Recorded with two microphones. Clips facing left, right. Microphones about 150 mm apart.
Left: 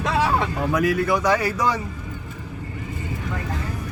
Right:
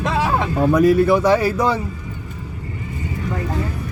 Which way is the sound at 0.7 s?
25° right (ahead or behind).